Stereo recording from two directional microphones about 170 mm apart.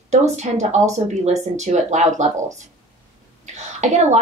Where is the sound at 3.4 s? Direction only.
45° right (ahead or behind).